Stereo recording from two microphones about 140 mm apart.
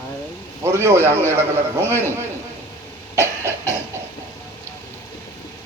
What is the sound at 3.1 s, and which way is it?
Cough, 20° right (ahead or behind).